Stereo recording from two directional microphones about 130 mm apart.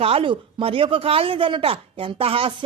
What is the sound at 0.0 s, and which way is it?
Speech, 45° right (ahead or behind).